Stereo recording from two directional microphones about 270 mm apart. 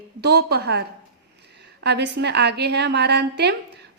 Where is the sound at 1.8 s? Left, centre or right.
Right.